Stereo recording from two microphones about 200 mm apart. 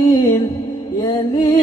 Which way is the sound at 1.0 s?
20° left (ahead or behind).